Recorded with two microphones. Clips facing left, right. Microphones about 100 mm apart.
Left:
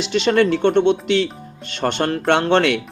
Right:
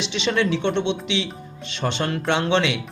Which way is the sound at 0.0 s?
45° left (ahead or behind).